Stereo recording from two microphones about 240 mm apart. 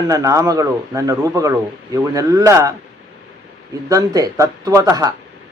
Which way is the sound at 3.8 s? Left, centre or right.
Centre.